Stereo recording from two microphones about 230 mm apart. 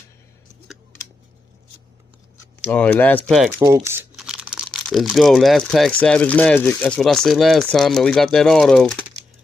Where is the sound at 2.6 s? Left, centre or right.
Centre.